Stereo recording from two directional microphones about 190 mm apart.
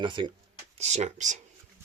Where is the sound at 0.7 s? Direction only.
35° right (ahead or behind).